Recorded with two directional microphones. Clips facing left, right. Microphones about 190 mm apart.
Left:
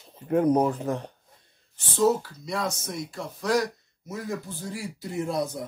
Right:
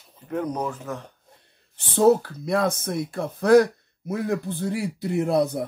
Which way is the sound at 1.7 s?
60° right (ahead or behind).